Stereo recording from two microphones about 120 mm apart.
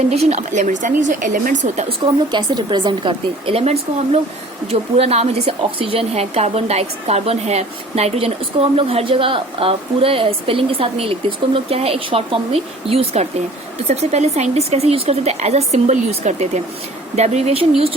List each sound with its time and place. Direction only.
0.1 s speech: 60° right (ahead or behind); by 1.3 s 90° right
1.9 s a woman's voice: 40° right (ahead or behind)
13.8 s a woman's voice: 70° right (ahead or behind)